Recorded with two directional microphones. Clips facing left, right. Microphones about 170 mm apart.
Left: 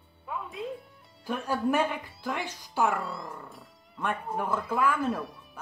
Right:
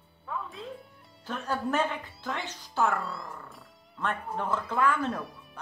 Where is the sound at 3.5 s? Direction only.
Centre (ahead or behind).